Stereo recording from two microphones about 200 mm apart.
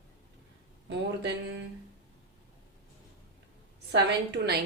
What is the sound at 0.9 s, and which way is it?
Speech, 60° right (ahead or behind).